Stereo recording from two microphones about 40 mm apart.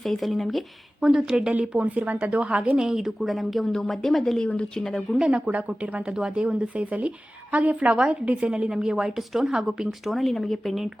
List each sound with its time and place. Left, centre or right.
0.0 s speech: centre
1.2 s speech: right
2.7 s a woman's voice: centre
3.2 s speech: centre
3.7 s speech: centre
5.3 s speech: right
6.1 s speech: right
7.9 s speech: right
8.2 s speech: right
8.4 s a woman's voice: centre
10.1 s speech: centre